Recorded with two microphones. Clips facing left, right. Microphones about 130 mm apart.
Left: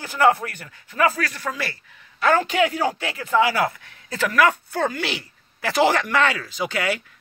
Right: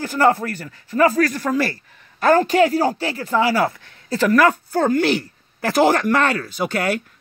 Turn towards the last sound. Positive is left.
turn(degrees=-50)  # may be behind; listen again after turning